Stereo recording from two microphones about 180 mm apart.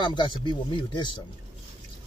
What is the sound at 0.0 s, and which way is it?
Speech, 25° left (ahead or behind).